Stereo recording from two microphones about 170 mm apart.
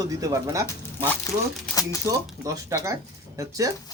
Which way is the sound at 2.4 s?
20° right (ahead or behind).